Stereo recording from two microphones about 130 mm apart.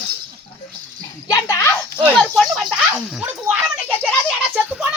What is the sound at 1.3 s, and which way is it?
Speech, 25° left (ahead or behind).